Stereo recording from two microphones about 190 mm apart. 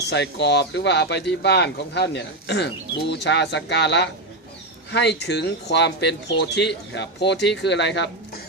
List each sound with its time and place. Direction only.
0.1 s speech: 65° left (ahead or behind)